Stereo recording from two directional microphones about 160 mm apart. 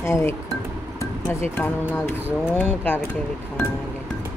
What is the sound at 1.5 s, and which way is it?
Speech, 15° left (ahead or behind).